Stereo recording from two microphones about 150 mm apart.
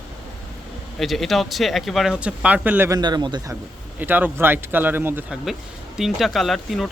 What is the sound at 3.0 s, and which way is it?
Speech, 30° right (ahead or behind).